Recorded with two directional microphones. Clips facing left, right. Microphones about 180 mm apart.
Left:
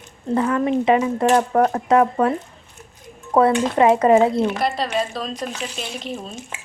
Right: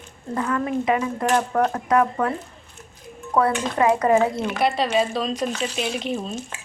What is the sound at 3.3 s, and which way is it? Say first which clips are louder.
Speech: left 5 dB; 25° left (ahead or behind).